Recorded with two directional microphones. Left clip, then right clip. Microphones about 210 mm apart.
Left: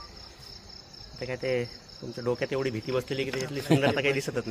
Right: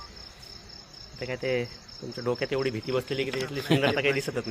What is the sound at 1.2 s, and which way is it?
Speech, centre (ahead or behind).